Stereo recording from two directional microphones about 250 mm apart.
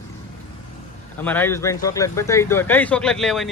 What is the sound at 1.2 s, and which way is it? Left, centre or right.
Speech, centre.